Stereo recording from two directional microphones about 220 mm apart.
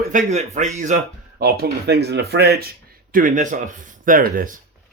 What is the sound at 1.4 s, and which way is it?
Speech, 45° right (ahead or behind).